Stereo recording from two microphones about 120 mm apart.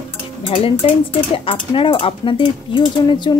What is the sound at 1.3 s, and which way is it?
A woman's voice, 50° left (ahead or behind).